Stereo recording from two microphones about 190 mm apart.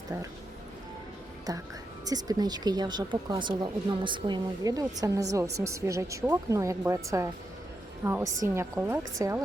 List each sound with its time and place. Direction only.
2.0 s a woman's voice: 20° right (ahead or behind)